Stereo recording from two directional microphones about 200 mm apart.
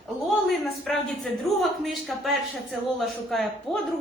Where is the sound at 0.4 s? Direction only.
Centre (ahead or behind).